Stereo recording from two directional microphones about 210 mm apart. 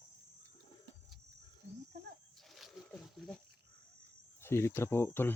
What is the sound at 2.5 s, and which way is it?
Wild animals, centre (ahead or behind).